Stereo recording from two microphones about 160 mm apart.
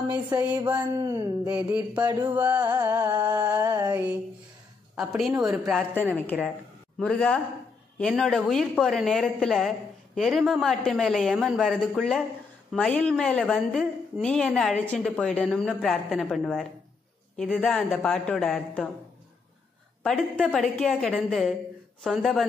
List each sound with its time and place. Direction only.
0.4 s music: 10° right (ahead or behind)
0.7 s speech: 20° right (ahead or behind)
2.2 s music: 10° right (ahead or behind)
4.9 s speech: 5° right (ahead or behind)
20.0 s speech: centre (ahead or behind)